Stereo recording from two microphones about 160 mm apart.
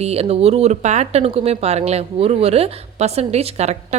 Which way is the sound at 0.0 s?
40° right (ahead or behind).